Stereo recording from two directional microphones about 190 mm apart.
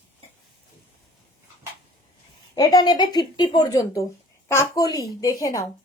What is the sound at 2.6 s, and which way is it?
A woman's voice, 20° left (ahead or behind).